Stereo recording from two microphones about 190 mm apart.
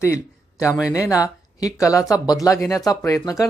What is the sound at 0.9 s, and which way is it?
Speech, 15° left (ahead or behind).